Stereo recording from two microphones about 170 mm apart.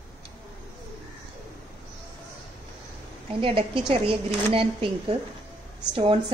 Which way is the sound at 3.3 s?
30° right (ahead or behind).